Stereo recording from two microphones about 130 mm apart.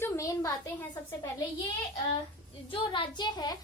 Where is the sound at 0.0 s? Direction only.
25° left (ahead or behind).